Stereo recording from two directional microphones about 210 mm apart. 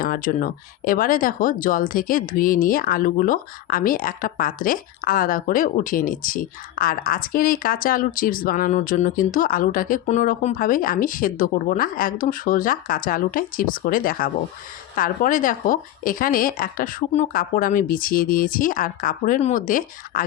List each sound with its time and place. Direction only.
0.0 s speech: 40° left (ahead or behind)